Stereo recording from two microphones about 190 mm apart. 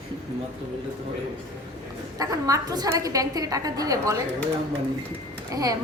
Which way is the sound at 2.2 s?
20° right (ahead or behind).